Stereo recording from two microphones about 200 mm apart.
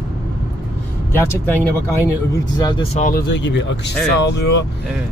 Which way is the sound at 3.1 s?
55° left (ahead or behind).